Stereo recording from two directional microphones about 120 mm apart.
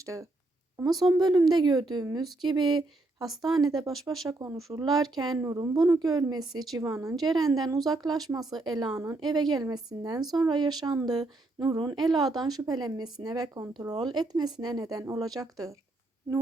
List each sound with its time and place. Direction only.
0.0 s a woman's voice: 25° right (ahead or behind)
3.2 s a woman's voice: centre (ahead or behind)
3.6 s a woman's voice: 30° right (ahead or behind)